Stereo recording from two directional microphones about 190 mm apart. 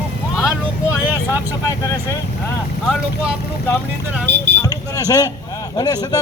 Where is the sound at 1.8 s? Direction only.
15° left (ahead or behind).